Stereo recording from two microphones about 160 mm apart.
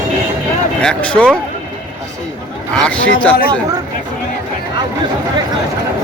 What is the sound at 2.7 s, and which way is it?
Speech, 5° left (ahead or behind).